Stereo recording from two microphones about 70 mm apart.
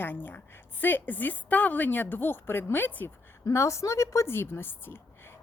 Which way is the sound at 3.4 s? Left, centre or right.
Left.